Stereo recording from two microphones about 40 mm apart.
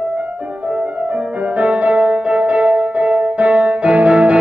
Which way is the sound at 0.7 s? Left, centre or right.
Right.